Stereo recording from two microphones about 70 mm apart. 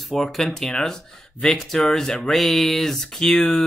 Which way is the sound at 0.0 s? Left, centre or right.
Centre.